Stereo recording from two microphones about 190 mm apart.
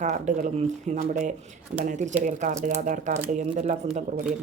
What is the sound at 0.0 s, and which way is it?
Speech, 40° right (ahead or behind).